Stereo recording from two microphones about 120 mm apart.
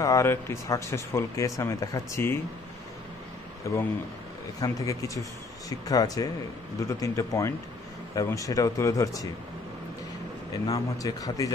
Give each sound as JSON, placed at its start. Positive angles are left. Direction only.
{"t": 0.0, "sound": "speech", "side_deg": 25}
{"t": 3.6, "sound": "speech", "side_deg": 25}
{"t": 10.7, "sound": "speech", "side_deg": 30}